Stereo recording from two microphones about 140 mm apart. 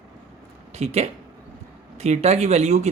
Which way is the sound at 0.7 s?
50° right (ahead or behind).